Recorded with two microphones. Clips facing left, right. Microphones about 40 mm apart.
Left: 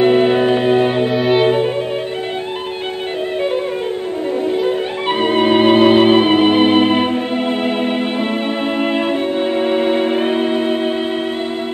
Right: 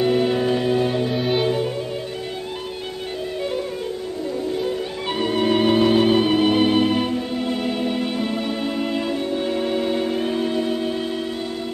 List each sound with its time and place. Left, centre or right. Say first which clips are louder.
0.0 s music: left 7 dB; left
1.1 s music: left 7 dB; centre
1.4 s violin: left 7 dB; left
4.5 s music: left 7 dB; left